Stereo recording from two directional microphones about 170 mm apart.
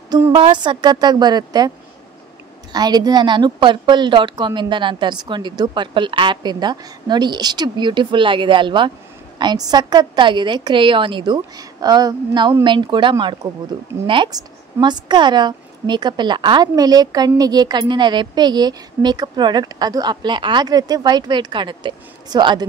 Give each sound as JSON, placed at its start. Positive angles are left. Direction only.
{"t": 0.3, "sound": "a woman's voice", "side_deg": -30}
{"t": 2.7, "sound": "a woman's voice", "side_deg": -25}